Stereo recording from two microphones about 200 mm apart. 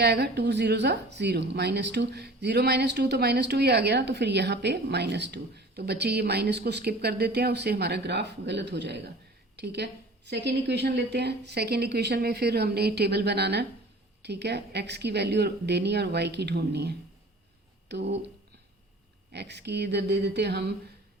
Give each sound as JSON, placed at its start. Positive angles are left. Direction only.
{"t": 0.0, "sound": "a woman's voice", "side_deg": -55}
{"t": 19.3, "sound": "a woman's voice", "side_deg": -60}